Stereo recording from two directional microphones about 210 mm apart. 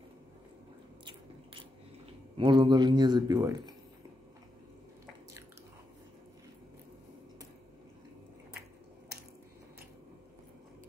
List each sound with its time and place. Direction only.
2.3 s a man's voice: 20° right (ahead or behind)